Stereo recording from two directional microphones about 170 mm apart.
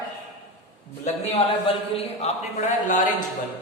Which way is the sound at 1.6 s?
35° left (ahead or behind).